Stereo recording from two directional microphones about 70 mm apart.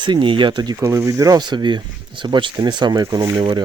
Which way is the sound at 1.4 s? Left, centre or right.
Right.